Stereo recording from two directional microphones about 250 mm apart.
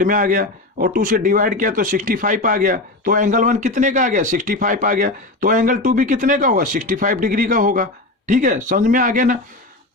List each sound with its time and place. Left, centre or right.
0.0 s a man's voice: right